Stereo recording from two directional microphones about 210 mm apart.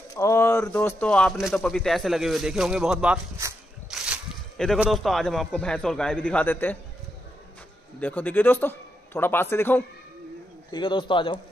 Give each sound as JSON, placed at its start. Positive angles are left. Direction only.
{"t": 0.1, "sound": "speech", "side_deg": 15}
{"t": 8.0, "sound": "a man's voice", "side_deg": 10}
{"t": 10.7, "sound": "a man's voice", "side_deg": 25}